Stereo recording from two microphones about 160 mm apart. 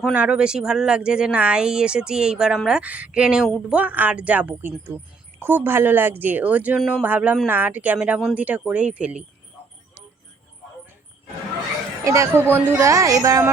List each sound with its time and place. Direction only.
0.0 s a woman's voice: 10° right (ahead or behind)
12.0 s a woman's voice: 20° right (ahead or behind)